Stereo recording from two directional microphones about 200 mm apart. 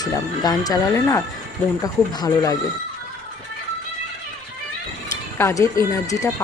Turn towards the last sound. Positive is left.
turn(degrees=15)  # may be behind; listen again after turning